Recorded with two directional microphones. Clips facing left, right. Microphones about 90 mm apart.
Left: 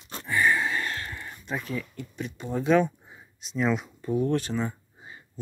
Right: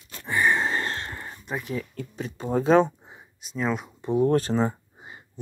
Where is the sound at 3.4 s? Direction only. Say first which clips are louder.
Left 1 dB; 5° right (ahead or behind).